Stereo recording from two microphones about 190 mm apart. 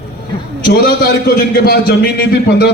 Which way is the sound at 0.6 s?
55° left (ahead or behind).